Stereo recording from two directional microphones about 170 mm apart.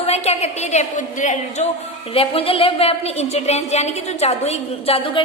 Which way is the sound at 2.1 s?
35° left (ahead or behind).